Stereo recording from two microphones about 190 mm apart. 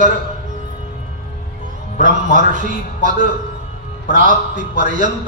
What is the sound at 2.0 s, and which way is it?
A man's voice, 40° right (ahead or behind).